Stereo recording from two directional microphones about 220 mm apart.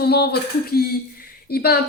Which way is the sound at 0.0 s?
45° left (ahead or behind).